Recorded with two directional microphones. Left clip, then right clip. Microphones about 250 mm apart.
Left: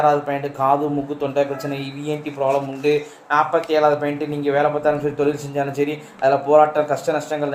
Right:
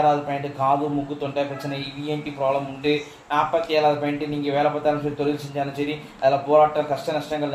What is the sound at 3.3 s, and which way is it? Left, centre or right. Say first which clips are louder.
Speech: left 3 dB; left.